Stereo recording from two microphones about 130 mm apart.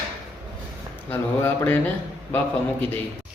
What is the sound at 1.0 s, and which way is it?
Speech, 15° left (ahead or behind).